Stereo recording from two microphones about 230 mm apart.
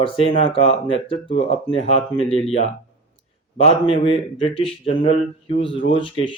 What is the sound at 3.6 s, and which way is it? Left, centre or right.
Speech, left.